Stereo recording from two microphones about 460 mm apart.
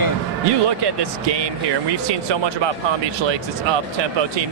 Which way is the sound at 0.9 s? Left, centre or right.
Right.